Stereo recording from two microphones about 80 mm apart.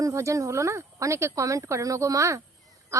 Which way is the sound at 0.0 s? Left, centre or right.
Right.